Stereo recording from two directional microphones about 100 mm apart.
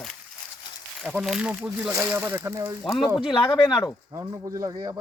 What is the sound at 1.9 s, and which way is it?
Speech, 20° right (ahead or behind).